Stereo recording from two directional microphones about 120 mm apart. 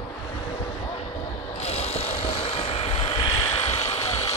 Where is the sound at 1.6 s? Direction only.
60° left (ahead or behind).